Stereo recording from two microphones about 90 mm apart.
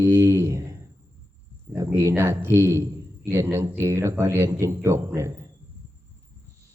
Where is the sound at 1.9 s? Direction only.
30° right (ahead or behind).